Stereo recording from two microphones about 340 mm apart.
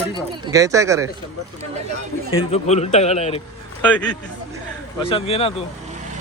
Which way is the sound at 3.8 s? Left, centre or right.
Centre.